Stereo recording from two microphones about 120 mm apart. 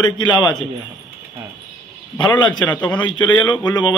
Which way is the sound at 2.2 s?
35° left (ahead or behind).